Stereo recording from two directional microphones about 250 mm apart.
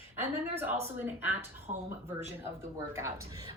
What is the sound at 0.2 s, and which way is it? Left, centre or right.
Speech, centre.